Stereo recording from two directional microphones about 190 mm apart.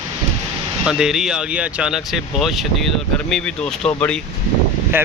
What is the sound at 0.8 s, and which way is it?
Speech, 5° right (ahead or behind).